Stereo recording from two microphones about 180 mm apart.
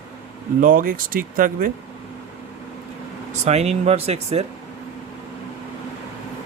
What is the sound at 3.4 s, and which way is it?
Speech, 35° right (ahead or behind).